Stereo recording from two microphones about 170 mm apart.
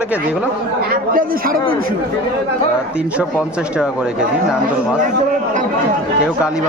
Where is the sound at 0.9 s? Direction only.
55° right (ahead or behind).